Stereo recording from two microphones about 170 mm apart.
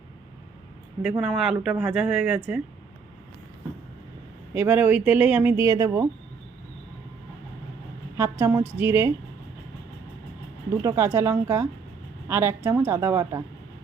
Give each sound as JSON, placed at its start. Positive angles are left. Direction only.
{"t": 1.2, "sound": "speech", "side_deg": -5}
{"t": 4.5, "sound": "speech", "side_deg": -10}
{"t": 8.1, "sound": "a woman's voice", "side_deg": -15}
{"t": 10.8, "sound": "speech", "side_deg": -15}